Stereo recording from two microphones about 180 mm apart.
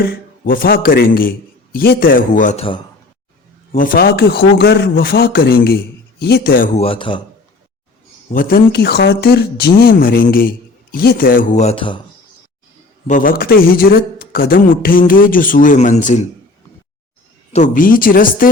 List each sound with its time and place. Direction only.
0.0 s speech: 55° left (ahead or behind)
3.7 s speech: 50° left (ahead or behind)
6.7 s speech: 30° left (ahead or behind)
8.3 s speech: 50° left (ahead or behind)
11.6 s speech: 30° left (ahead or behind)
13.1 s speech: 50° left (ahead or behind)
17.5 s speech: 45° left (ahead or behind)